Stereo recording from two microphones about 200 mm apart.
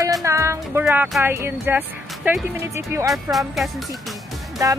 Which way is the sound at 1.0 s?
Centre (ahead or behind).